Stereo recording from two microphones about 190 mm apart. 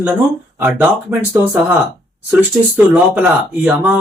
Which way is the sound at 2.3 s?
5° right (ahead or behind).